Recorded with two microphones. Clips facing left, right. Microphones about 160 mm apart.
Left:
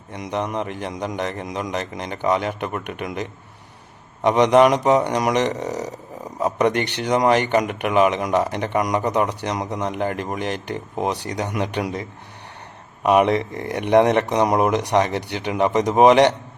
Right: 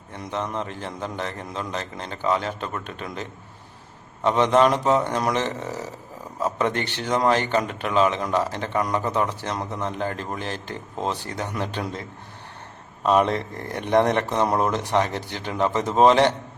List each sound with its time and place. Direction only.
0.3 s a man's voice: 15° left (ahead or behind)
4.2 s a man's voice: 15° left (ahead or behind)